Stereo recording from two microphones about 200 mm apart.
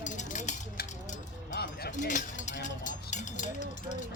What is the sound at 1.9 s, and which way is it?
Speech, 40° left (ahead or behind).